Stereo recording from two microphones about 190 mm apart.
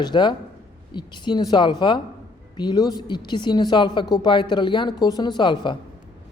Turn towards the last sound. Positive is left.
turn(degrees=25)  # may be behind; listen again after turning